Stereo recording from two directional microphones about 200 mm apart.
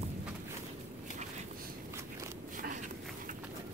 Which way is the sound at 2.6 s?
40° right (ahead or behind).